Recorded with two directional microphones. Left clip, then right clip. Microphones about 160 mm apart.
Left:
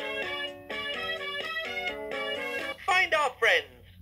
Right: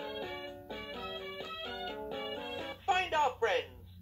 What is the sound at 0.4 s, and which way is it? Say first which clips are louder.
Music: left 9 dB; 25° left (ahead or behind).